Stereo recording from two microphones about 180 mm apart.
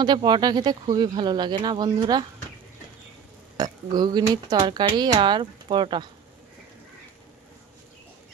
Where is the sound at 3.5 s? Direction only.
20° right (ahead or behind).